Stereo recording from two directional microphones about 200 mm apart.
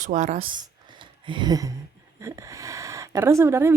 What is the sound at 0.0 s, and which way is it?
Speech, 40° right (ahead or behind).